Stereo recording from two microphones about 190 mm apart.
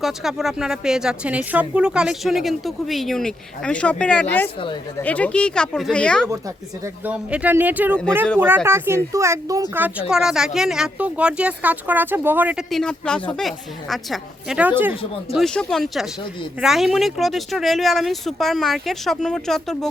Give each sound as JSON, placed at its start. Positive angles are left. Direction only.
{"t": 0.0, "sound": "a woman's voice", "side_deg": 0}
{"t": 6.8, "sound": "speech", "side_deg": -10}
{"t": 10.1, "sound": "a woman's voice", "side_deg": -5}
{"t": 15.4, "sound": "a woman's voice", "side_deg": 0}